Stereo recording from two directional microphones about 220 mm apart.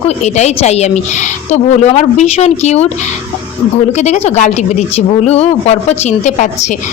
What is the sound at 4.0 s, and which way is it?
A woman's voice, 30° left (ahead or behind).